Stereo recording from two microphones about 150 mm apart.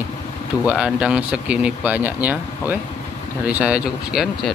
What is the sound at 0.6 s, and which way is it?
Speech, 5° right (ahead or behind).